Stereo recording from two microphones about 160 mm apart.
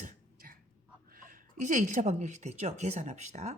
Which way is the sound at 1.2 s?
50° right (ahead or behind).